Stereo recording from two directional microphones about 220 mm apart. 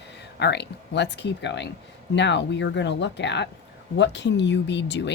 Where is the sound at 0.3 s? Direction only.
50° left (ahead or behind).